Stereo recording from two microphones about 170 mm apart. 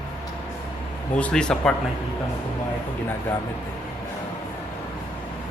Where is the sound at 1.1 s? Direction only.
5° left (ahead or behind).